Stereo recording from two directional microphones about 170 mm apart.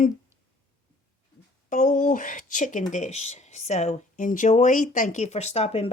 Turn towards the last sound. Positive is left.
turn(degrees=35)  # may be behind; listen again after turning